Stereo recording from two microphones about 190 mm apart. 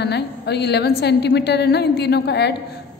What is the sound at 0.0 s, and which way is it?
A woman's voice, 60° left (ahead or behind).